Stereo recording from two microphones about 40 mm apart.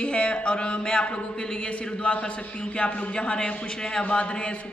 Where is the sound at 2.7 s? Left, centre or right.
Left.